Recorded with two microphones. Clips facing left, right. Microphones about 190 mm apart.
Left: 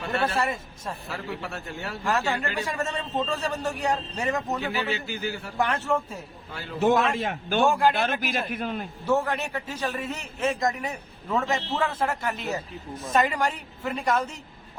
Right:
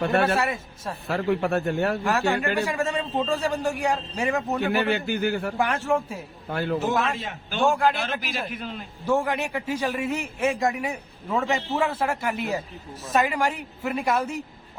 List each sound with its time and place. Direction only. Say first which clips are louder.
0.3 s a man's voice: right 1 dB; 10° right (ahead or behind)
1.0 s a man's voice: right 14 dB; 55° right (ahead or behind)
2.0 s a man's voice: right 3 dB; 10° right (ahead or behind)
4.7 s a man's voice: right 6 dB; 55° right (ahead or behind)
5.5 s a man's voice: left 3 dB; 10° right (ahead or behind)
6.5 s a man's voice: right 13 dB; 60° right (ahead or behind)
7.2 s a man's voice: left 6 dB; 55° left (ahead or behind)
7.6 s a man's voice: right 1 dB; centre (ahead or behind)
7.9 s a man's voice: left 3 dB; 50° left (ahead or behind)
9.0 s a man's voice: right 1 dB; 10° right (ahead or behind)